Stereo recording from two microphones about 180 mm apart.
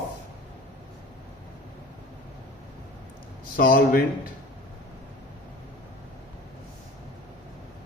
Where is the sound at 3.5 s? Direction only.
50° left (ahead or behind).